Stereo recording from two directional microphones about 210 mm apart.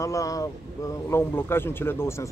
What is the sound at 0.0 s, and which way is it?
Speech, 15° left (ahead or behind).